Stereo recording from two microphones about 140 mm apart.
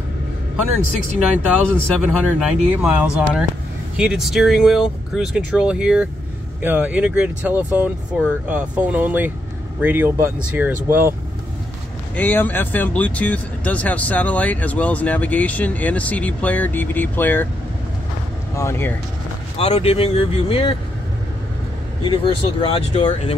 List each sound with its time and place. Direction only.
2.0 s speech: 5° right (ahead or behind)
12.2 s speech: 10° left (ahead or behind)
18.5 s speech: 20° left (ahead or behind)
19.5 s speech: 45° left (ahead or behind)
22.0 s speech: 40° left (ahead or behind)
23.0 s speech: 50° left (ahead or behind)